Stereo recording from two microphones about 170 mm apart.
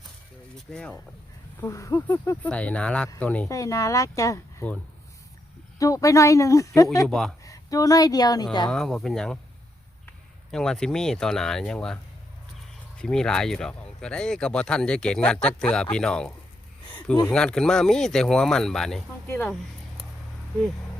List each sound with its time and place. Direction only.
0.5 s speech: 5° left (ahead or behind)
1.6 s speech: 20° left (ahead or behind)
3.5 s speech: 20° left (ahead or behind)
5.8 s speech: 20° left (ahead or behind)
7.1 s speech: 5° left (ahead or behind)
7.4 s speech: 20° left (ahead or behind)
8.7 s speech: centre (ahead or behind)
10.5 s speech: 5° left (ahead or behind)
13.0 s speech: 5° left (ahead or behind)
17.3 s speech: 5° left (ahead or behind)